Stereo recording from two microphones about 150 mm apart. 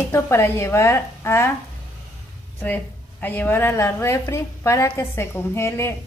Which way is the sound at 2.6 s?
10° left (ahead or behind).